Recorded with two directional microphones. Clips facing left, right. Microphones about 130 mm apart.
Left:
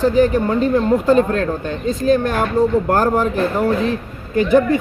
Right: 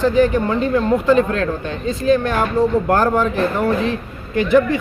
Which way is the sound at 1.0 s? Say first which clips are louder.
Left 1 dB; 40° left (ahead or behind).